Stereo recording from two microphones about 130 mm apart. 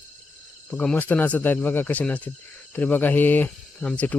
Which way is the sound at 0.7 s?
10° left (ahead or behind).